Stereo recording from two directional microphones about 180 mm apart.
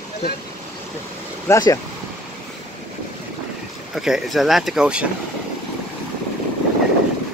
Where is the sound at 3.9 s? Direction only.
Centre (ahead or behind).